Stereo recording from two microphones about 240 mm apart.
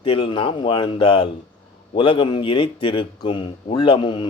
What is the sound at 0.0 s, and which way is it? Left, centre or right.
Speech, left.